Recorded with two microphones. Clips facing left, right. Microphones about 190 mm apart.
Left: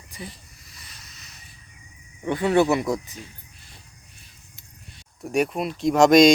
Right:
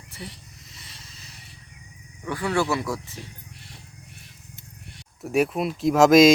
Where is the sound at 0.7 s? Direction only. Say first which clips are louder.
Even; 25° right (ahead or behind).